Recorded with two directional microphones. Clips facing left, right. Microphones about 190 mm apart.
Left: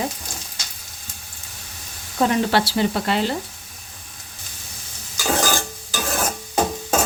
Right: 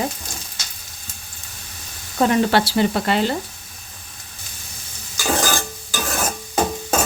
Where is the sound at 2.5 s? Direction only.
55° right (ahead or behind).